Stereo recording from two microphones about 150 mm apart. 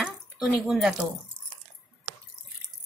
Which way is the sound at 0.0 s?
5° right (ahead or behind).